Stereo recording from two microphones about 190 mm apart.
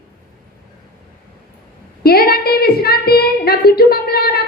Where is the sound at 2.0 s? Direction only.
55° left (ahead or behind).